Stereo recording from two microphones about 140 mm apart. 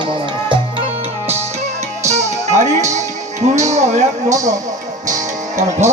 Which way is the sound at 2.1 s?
55° right (ahead or behind).